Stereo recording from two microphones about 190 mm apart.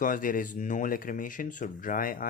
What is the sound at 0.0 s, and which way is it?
Speech, 45° left (ahead or behind).